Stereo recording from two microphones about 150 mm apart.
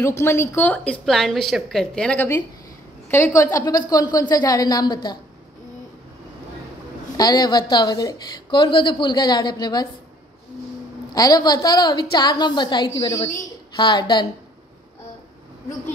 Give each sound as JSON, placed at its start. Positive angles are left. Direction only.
{"t": 0.0, "sound": "a woman's voice", "side_deg": 15}
{"t": 7.2, "sound": "a woman's voice", "side_deg": 25}
{"t": 11.1, "sound": "a woman's voice", "side_deg": 25}